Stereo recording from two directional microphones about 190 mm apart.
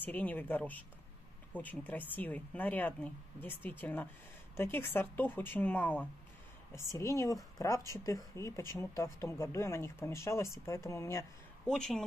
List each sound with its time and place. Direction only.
0.0 s speech: 10° left (ahead or behind)
11.6 s speech: centre (ahead or behind)